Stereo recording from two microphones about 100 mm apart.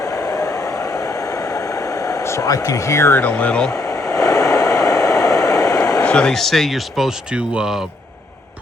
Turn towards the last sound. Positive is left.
turn(degrees=0)  # may be behind; listen again after turning